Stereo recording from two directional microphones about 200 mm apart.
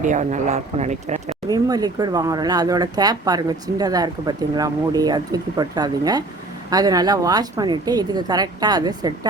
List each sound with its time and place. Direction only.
0.0 s speech: 40° right (ahead or behind)
1.5 s speech: 20° right (ahead or behind)